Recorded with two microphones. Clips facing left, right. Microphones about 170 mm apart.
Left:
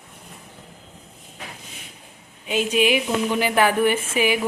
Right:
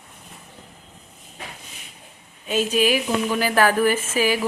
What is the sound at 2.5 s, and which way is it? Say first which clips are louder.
Speech: even; 15° left (ahead or behind).